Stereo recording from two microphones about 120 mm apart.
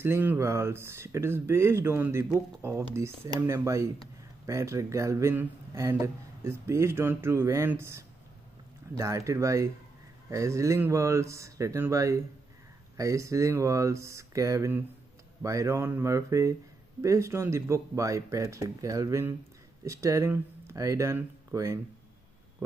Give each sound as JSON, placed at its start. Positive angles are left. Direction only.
{"t": 0.0, "sound": "speech", "side_deg": -20}